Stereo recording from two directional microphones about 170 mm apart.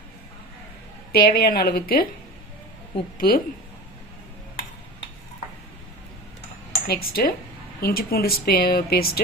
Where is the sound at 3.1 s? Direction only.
60° left (ahead or behind).